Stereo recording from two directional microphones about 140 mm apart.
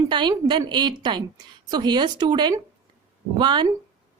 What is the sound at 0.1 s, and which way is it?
Speech, 35° right (ahead or behind).